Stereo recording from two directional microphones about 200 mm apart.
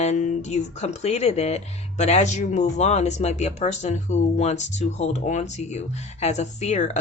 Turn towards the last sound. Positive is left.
turn(degrees=35)  # may be behind; listen again after turning